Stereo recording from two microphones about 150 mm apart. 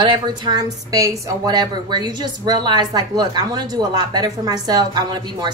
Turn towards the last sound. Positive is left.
turn(degrees=-30)  # may be behind; listen again after turning